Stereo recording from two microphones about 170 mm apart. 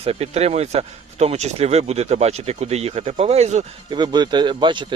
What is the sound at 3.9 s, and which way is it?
Speech, 25° right (ahead or behind).